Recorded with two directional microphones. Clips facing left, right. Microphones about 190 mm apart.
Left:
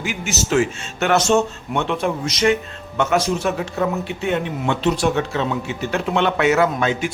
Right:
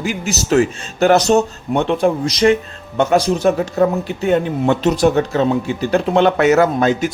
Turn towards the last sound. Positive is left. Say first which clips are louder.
# right 5 dB
turn(degrees=-40)  # may be behind; listen again after turning